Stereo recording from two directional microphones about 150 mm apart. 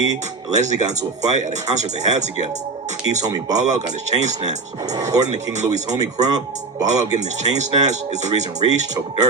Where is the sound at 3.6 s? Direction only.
50° right (ahead or behind).